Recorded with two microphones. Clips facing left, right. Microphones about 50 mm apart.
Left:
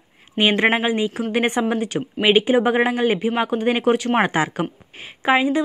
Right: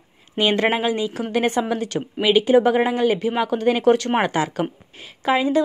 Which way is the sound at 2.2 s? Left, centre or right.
Left.